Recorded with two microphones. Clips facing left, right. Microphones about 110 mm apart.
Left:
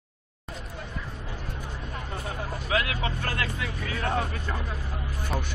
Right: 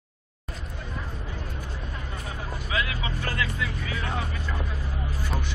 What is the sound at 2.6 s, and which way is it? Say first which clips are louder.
Speech: left 2 dB; 60° left (ahead or behind).